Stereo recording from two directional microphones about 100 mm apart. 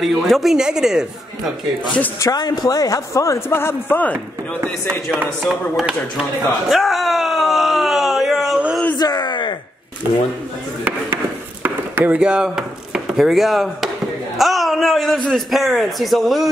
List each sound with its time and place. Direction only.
0.0 s a man's voice: centre (ahead or behind)
2.3 s a man's voice: 45° left (ahead or behind); by 4.2 s 20° left (ahead or behind)
5.5 s speech: 5° right (ahead or behind)
6.7 s a sound: centre (ahead or behind)
8.9 s a sound: 45° left (ahead or behind)
10.8 s chop: 15° right (ahead or behind)
11.6 s speech: 15° right (ahead or behind)
14.4 s a sound: centre (ahead or behind)
15.2 s a man's voice: centre (ahead or behind)